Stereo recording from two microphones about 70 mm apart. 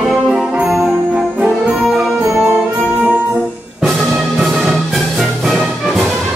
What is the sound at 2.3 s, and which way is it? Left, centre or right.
Music, centre.